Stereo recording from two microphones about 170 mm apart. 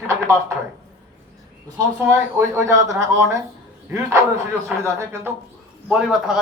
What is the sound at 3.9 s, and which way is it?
A man's voice, 15° right (ahead or behind).